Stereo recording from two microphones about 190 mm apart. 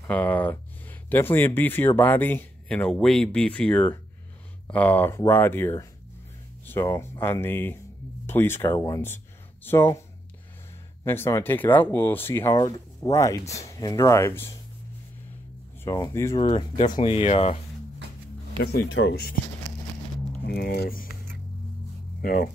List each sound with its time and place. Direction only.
0.0 s speech: 10° left (ahead or behind)
11.1 s speech: 15° left (ahead or behind)
15.8 s speech: 15° left (ahead or behind)
16.3 s speech: 30° left (ahead or behind)
18.9 s speech: 80° left
20.4 s speech: 55° left (ahead or behind)
22.2 s speech: 50° left (ahead or behind)